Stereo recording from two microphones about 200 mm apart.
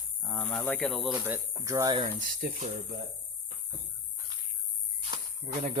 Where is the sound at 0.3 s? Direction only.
15° left (ahead or behind).